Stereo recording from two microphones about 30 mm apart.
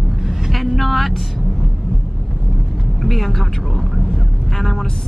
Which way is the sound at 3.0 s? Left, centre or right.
Centre.